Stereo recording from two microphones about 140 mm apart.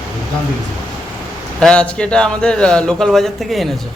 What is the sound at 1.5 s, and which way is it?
A man's voice, 5° left (ahead or behind).